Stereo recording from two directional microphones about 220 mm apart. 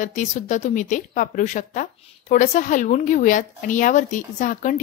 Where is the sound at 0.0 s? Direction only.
35° left (ahead or behind).